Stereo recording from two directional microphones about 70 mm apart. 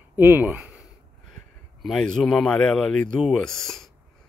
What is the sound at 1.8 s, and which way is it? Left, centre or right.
Speech, centre.